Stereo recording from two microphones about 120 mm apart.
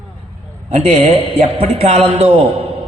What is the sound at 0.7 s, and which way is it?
A man's voice, 60° right (ahead or behind).